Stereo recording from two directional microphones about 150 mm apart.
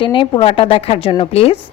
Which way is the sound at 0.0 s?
35° left (ahead or behind).